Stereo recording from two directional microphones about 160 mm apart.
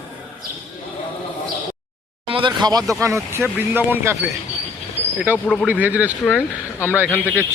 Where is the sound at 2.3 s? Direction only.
30° right (ahead or behind); by 4.2 s 15° right (ahead or behind).